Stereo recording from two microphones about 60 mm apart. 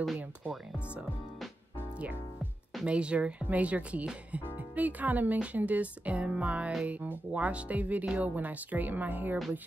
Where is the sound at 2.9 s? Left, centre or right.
Centre.